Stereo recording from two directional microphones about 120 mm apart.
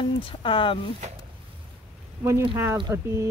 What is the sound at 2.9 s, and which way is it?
Speech, 25° right (ahead or behind).